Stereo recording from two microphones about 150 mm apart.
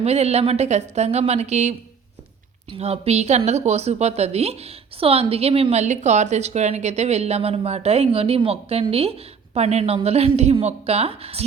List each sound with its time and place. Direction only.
0.0 s a woman's voice: 45° right (ahead or behind)
2.7 s a woman's voice: 40° right (ahead or behind)